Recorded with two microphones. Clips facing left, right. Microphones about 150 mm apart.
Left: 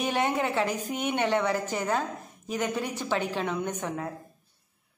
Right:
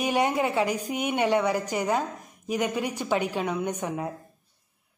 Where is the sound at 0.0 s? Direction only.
10° right (ahead or behind).